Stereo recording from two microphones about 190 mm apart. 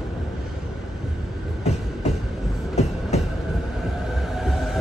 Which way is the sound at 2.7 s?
35° left (ahead or behind).